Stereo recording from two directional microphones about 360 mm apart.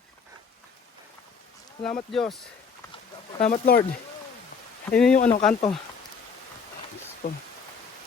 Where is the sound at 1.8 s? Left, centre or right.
Centre.